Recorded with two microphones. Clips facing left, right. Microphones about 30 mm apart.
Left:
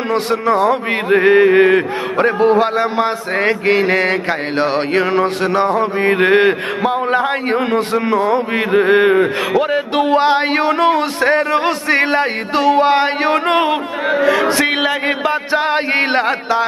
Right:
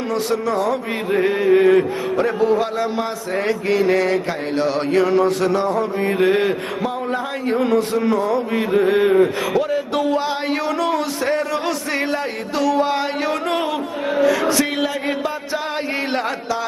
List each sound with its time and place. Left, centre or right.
0.1 s speech: left
9.7 s speech: left